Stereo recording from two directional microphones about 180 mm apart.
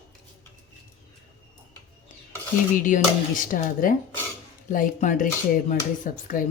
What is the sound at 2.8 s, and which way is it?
Speech, 50° left (ahead or behind).